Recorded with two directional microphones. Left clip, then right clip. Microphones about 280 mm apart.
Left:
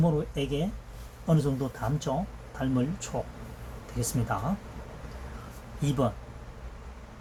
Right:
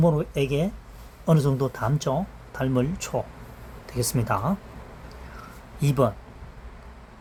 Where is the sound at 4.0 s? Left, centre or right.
Right.